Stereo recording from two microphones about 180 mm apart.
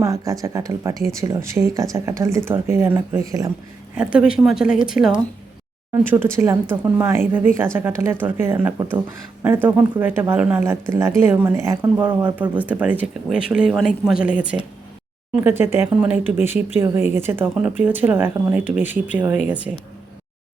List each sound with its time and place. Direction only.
0.0 s a woman's voice: 15° right (ahead or behind)